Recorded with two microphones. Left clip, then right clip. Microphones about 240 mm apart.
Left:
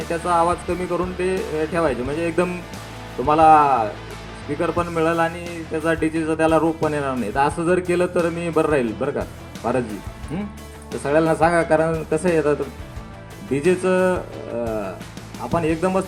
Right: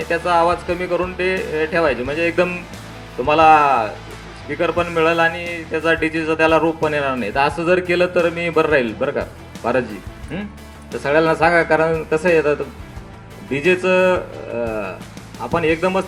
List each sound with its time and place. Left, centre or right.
0.1 s speech: left
11.0 s speech: left